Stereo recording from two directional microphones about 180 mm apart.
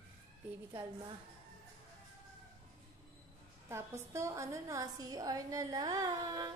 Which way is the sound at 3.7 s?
15° right (ahead or behind).